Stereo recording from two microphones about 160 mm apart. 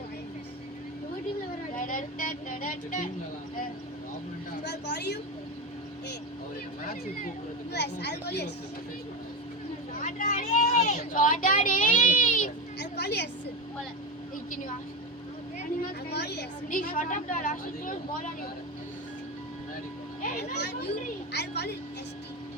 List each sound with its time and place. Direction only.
1.7 s vehicle: 55° left (ahead or behind)
4.6 s a sound: 90° left
6.8 s speech: 75° left (ahead or behind)
10.0 s speech: 60° left (ahead or behind)
12.8 s a sound: 90° left
16.0 s a woman's voice: 90° left; by 18.3 s 55° left (ahead or behind)
20.2 s speech: 90° left